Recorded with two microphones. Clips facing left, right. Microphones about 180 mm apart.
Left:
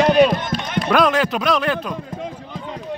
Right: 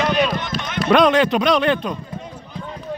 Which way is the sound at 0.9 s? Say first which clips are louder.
Right 3 dB; 5° left (ahead or behind).